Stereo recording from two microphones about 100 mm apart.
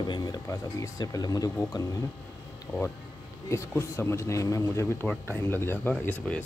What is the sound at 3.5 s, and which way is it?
Speech, 25° left (ahead or behind).